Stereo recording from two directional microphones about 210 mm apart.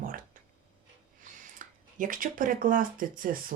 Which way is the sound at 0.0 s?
40° right (ahead or behind).